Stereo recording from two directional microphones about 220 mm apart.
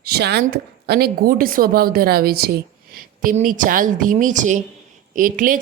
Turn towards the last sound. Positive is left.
turn(degrees=-40)  # may be behind; listen again after turning